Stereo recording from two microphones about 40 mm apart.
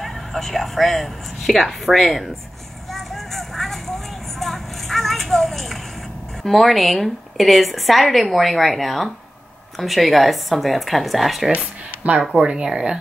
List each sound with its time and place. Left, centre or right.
0.0 s a woman's voice: centre
2.9 s vehicle: centre
6.4 s a woman's voice: centre
12.0 s speech: right
12.4 s speech: right